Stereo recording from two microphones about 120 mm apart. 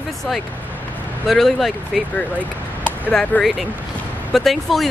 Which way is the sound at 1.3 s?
Centre (ahead or behind).